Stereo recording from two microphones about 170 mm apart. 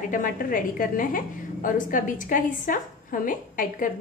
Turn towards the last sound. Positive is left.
turn(degrees=55)  # may be behind; listen again after turning